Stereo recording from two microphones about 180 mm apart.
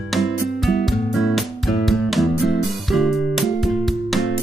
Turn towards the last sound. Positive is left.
turn(degrees=0)  # may be behind; listen again after turning